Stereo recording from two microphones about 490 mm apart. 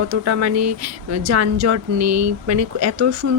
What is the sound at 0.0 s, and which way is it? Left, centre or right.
Speech, right.